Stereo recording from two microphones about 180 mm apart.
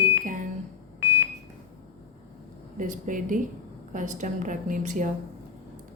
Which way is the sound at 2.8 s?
45° right (ahead or behind).